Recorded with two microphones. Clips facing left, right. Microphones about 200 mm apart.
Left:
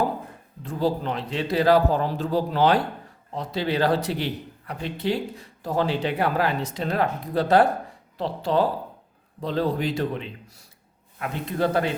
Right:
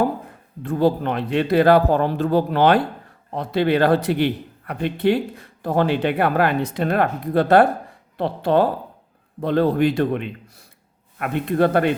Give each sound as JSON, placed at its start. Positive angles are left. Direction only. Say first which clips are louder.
{"t": 0.6, "sound": "a man's voice", "louder": "right 6 dB", "side_deg": -60}